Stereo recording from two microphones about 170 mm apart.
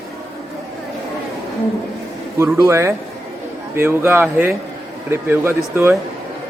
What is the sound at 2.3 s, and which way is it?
Speech, 15° right (ahead or behind).